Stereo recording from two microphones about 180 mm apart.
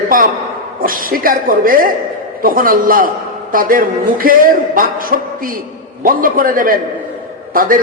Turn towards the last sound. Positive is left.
turn(degrees=-50)  # may be behind; listen again after turning